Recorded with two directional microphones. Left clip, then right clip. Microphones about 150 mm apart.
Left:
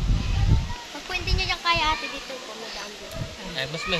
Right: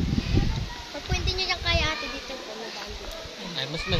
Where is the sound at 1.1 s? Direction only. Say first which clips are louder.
Left 1 dB; 30° right (ahead or behind).